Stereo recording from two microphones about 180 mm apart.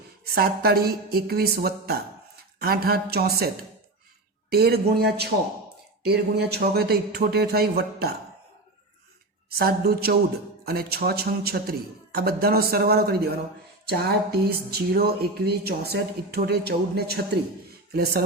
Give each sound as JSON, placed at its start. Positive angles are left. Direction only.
{"t": 0.3, "sound": "speech", "side_deg": -60}
{"t": 9.6, "sound": "speech", "side_deg": -60}